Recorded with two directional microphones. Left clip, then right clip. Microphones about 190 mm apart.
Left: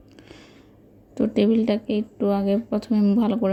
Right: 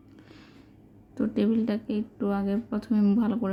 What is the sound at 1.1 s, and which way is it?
A woman's voice, 15° left (ahead or behind).